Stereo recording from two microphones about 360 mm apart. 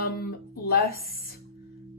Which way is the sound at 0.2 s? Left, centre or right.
Left.